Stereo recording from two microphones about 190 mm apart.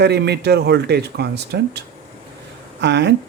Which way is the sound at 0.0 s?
60° right (ahead or behind).